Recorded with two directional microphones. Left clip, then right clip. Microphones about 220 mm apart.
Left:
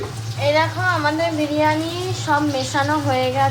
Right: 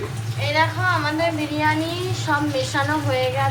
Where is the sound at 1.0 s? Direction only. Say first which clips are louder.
Left 2 dB; 40° left (ahead or behind).